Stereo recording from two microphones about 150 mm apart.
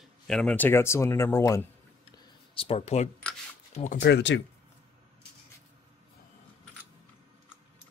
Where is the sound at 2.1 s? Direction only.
35° left (ahead or behind).